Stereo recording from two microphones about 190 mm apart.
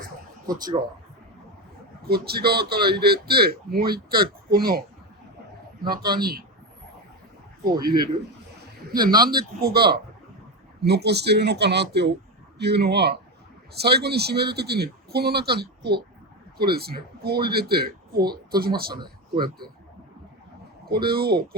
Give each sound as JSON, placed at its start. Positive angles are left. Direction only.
{"t": 0.4, "sound": "speech", "side_deg": -20}
{"t": 2.0, "sound": "a man's voice", "side_deg": -55}
{"t": 5.8, "sound": "a man's voice", "side_deg": -55}
{"t": 8.9, "sound": "a man's voice", "side_deg": -50}
{"t": 20.8, "sound": "a man's voice", "side_deg": -55}